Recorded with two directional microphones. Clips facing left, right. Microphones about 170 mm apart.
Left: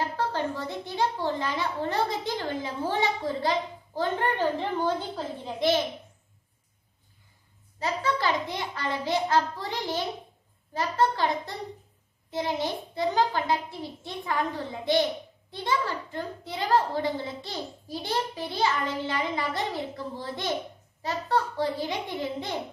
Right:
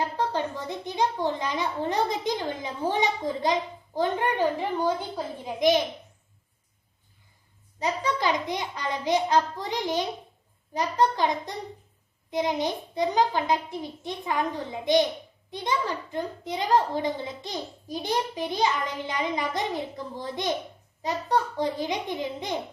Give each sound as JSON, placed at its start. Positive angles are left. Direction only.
{"t": 0.2, "sound": "a child's voice", "side_deg": -15}
{"t": 7.8, "sound": "a child's voice", "side_deg": -15}